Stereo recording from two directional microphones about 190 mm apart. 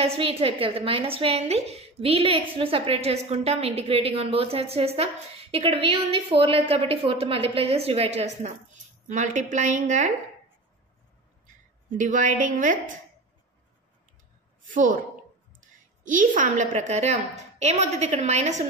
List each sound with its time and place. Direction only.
0.0 s a woman's voice: 30° right (ahead or behind)
12.0 s a woman's voice: 40° right (ahead or behind)
14.7 s a woman's voice: 45° right (ahead or behind)
16.0 s a woman's voice: 45° right (ahead or behind)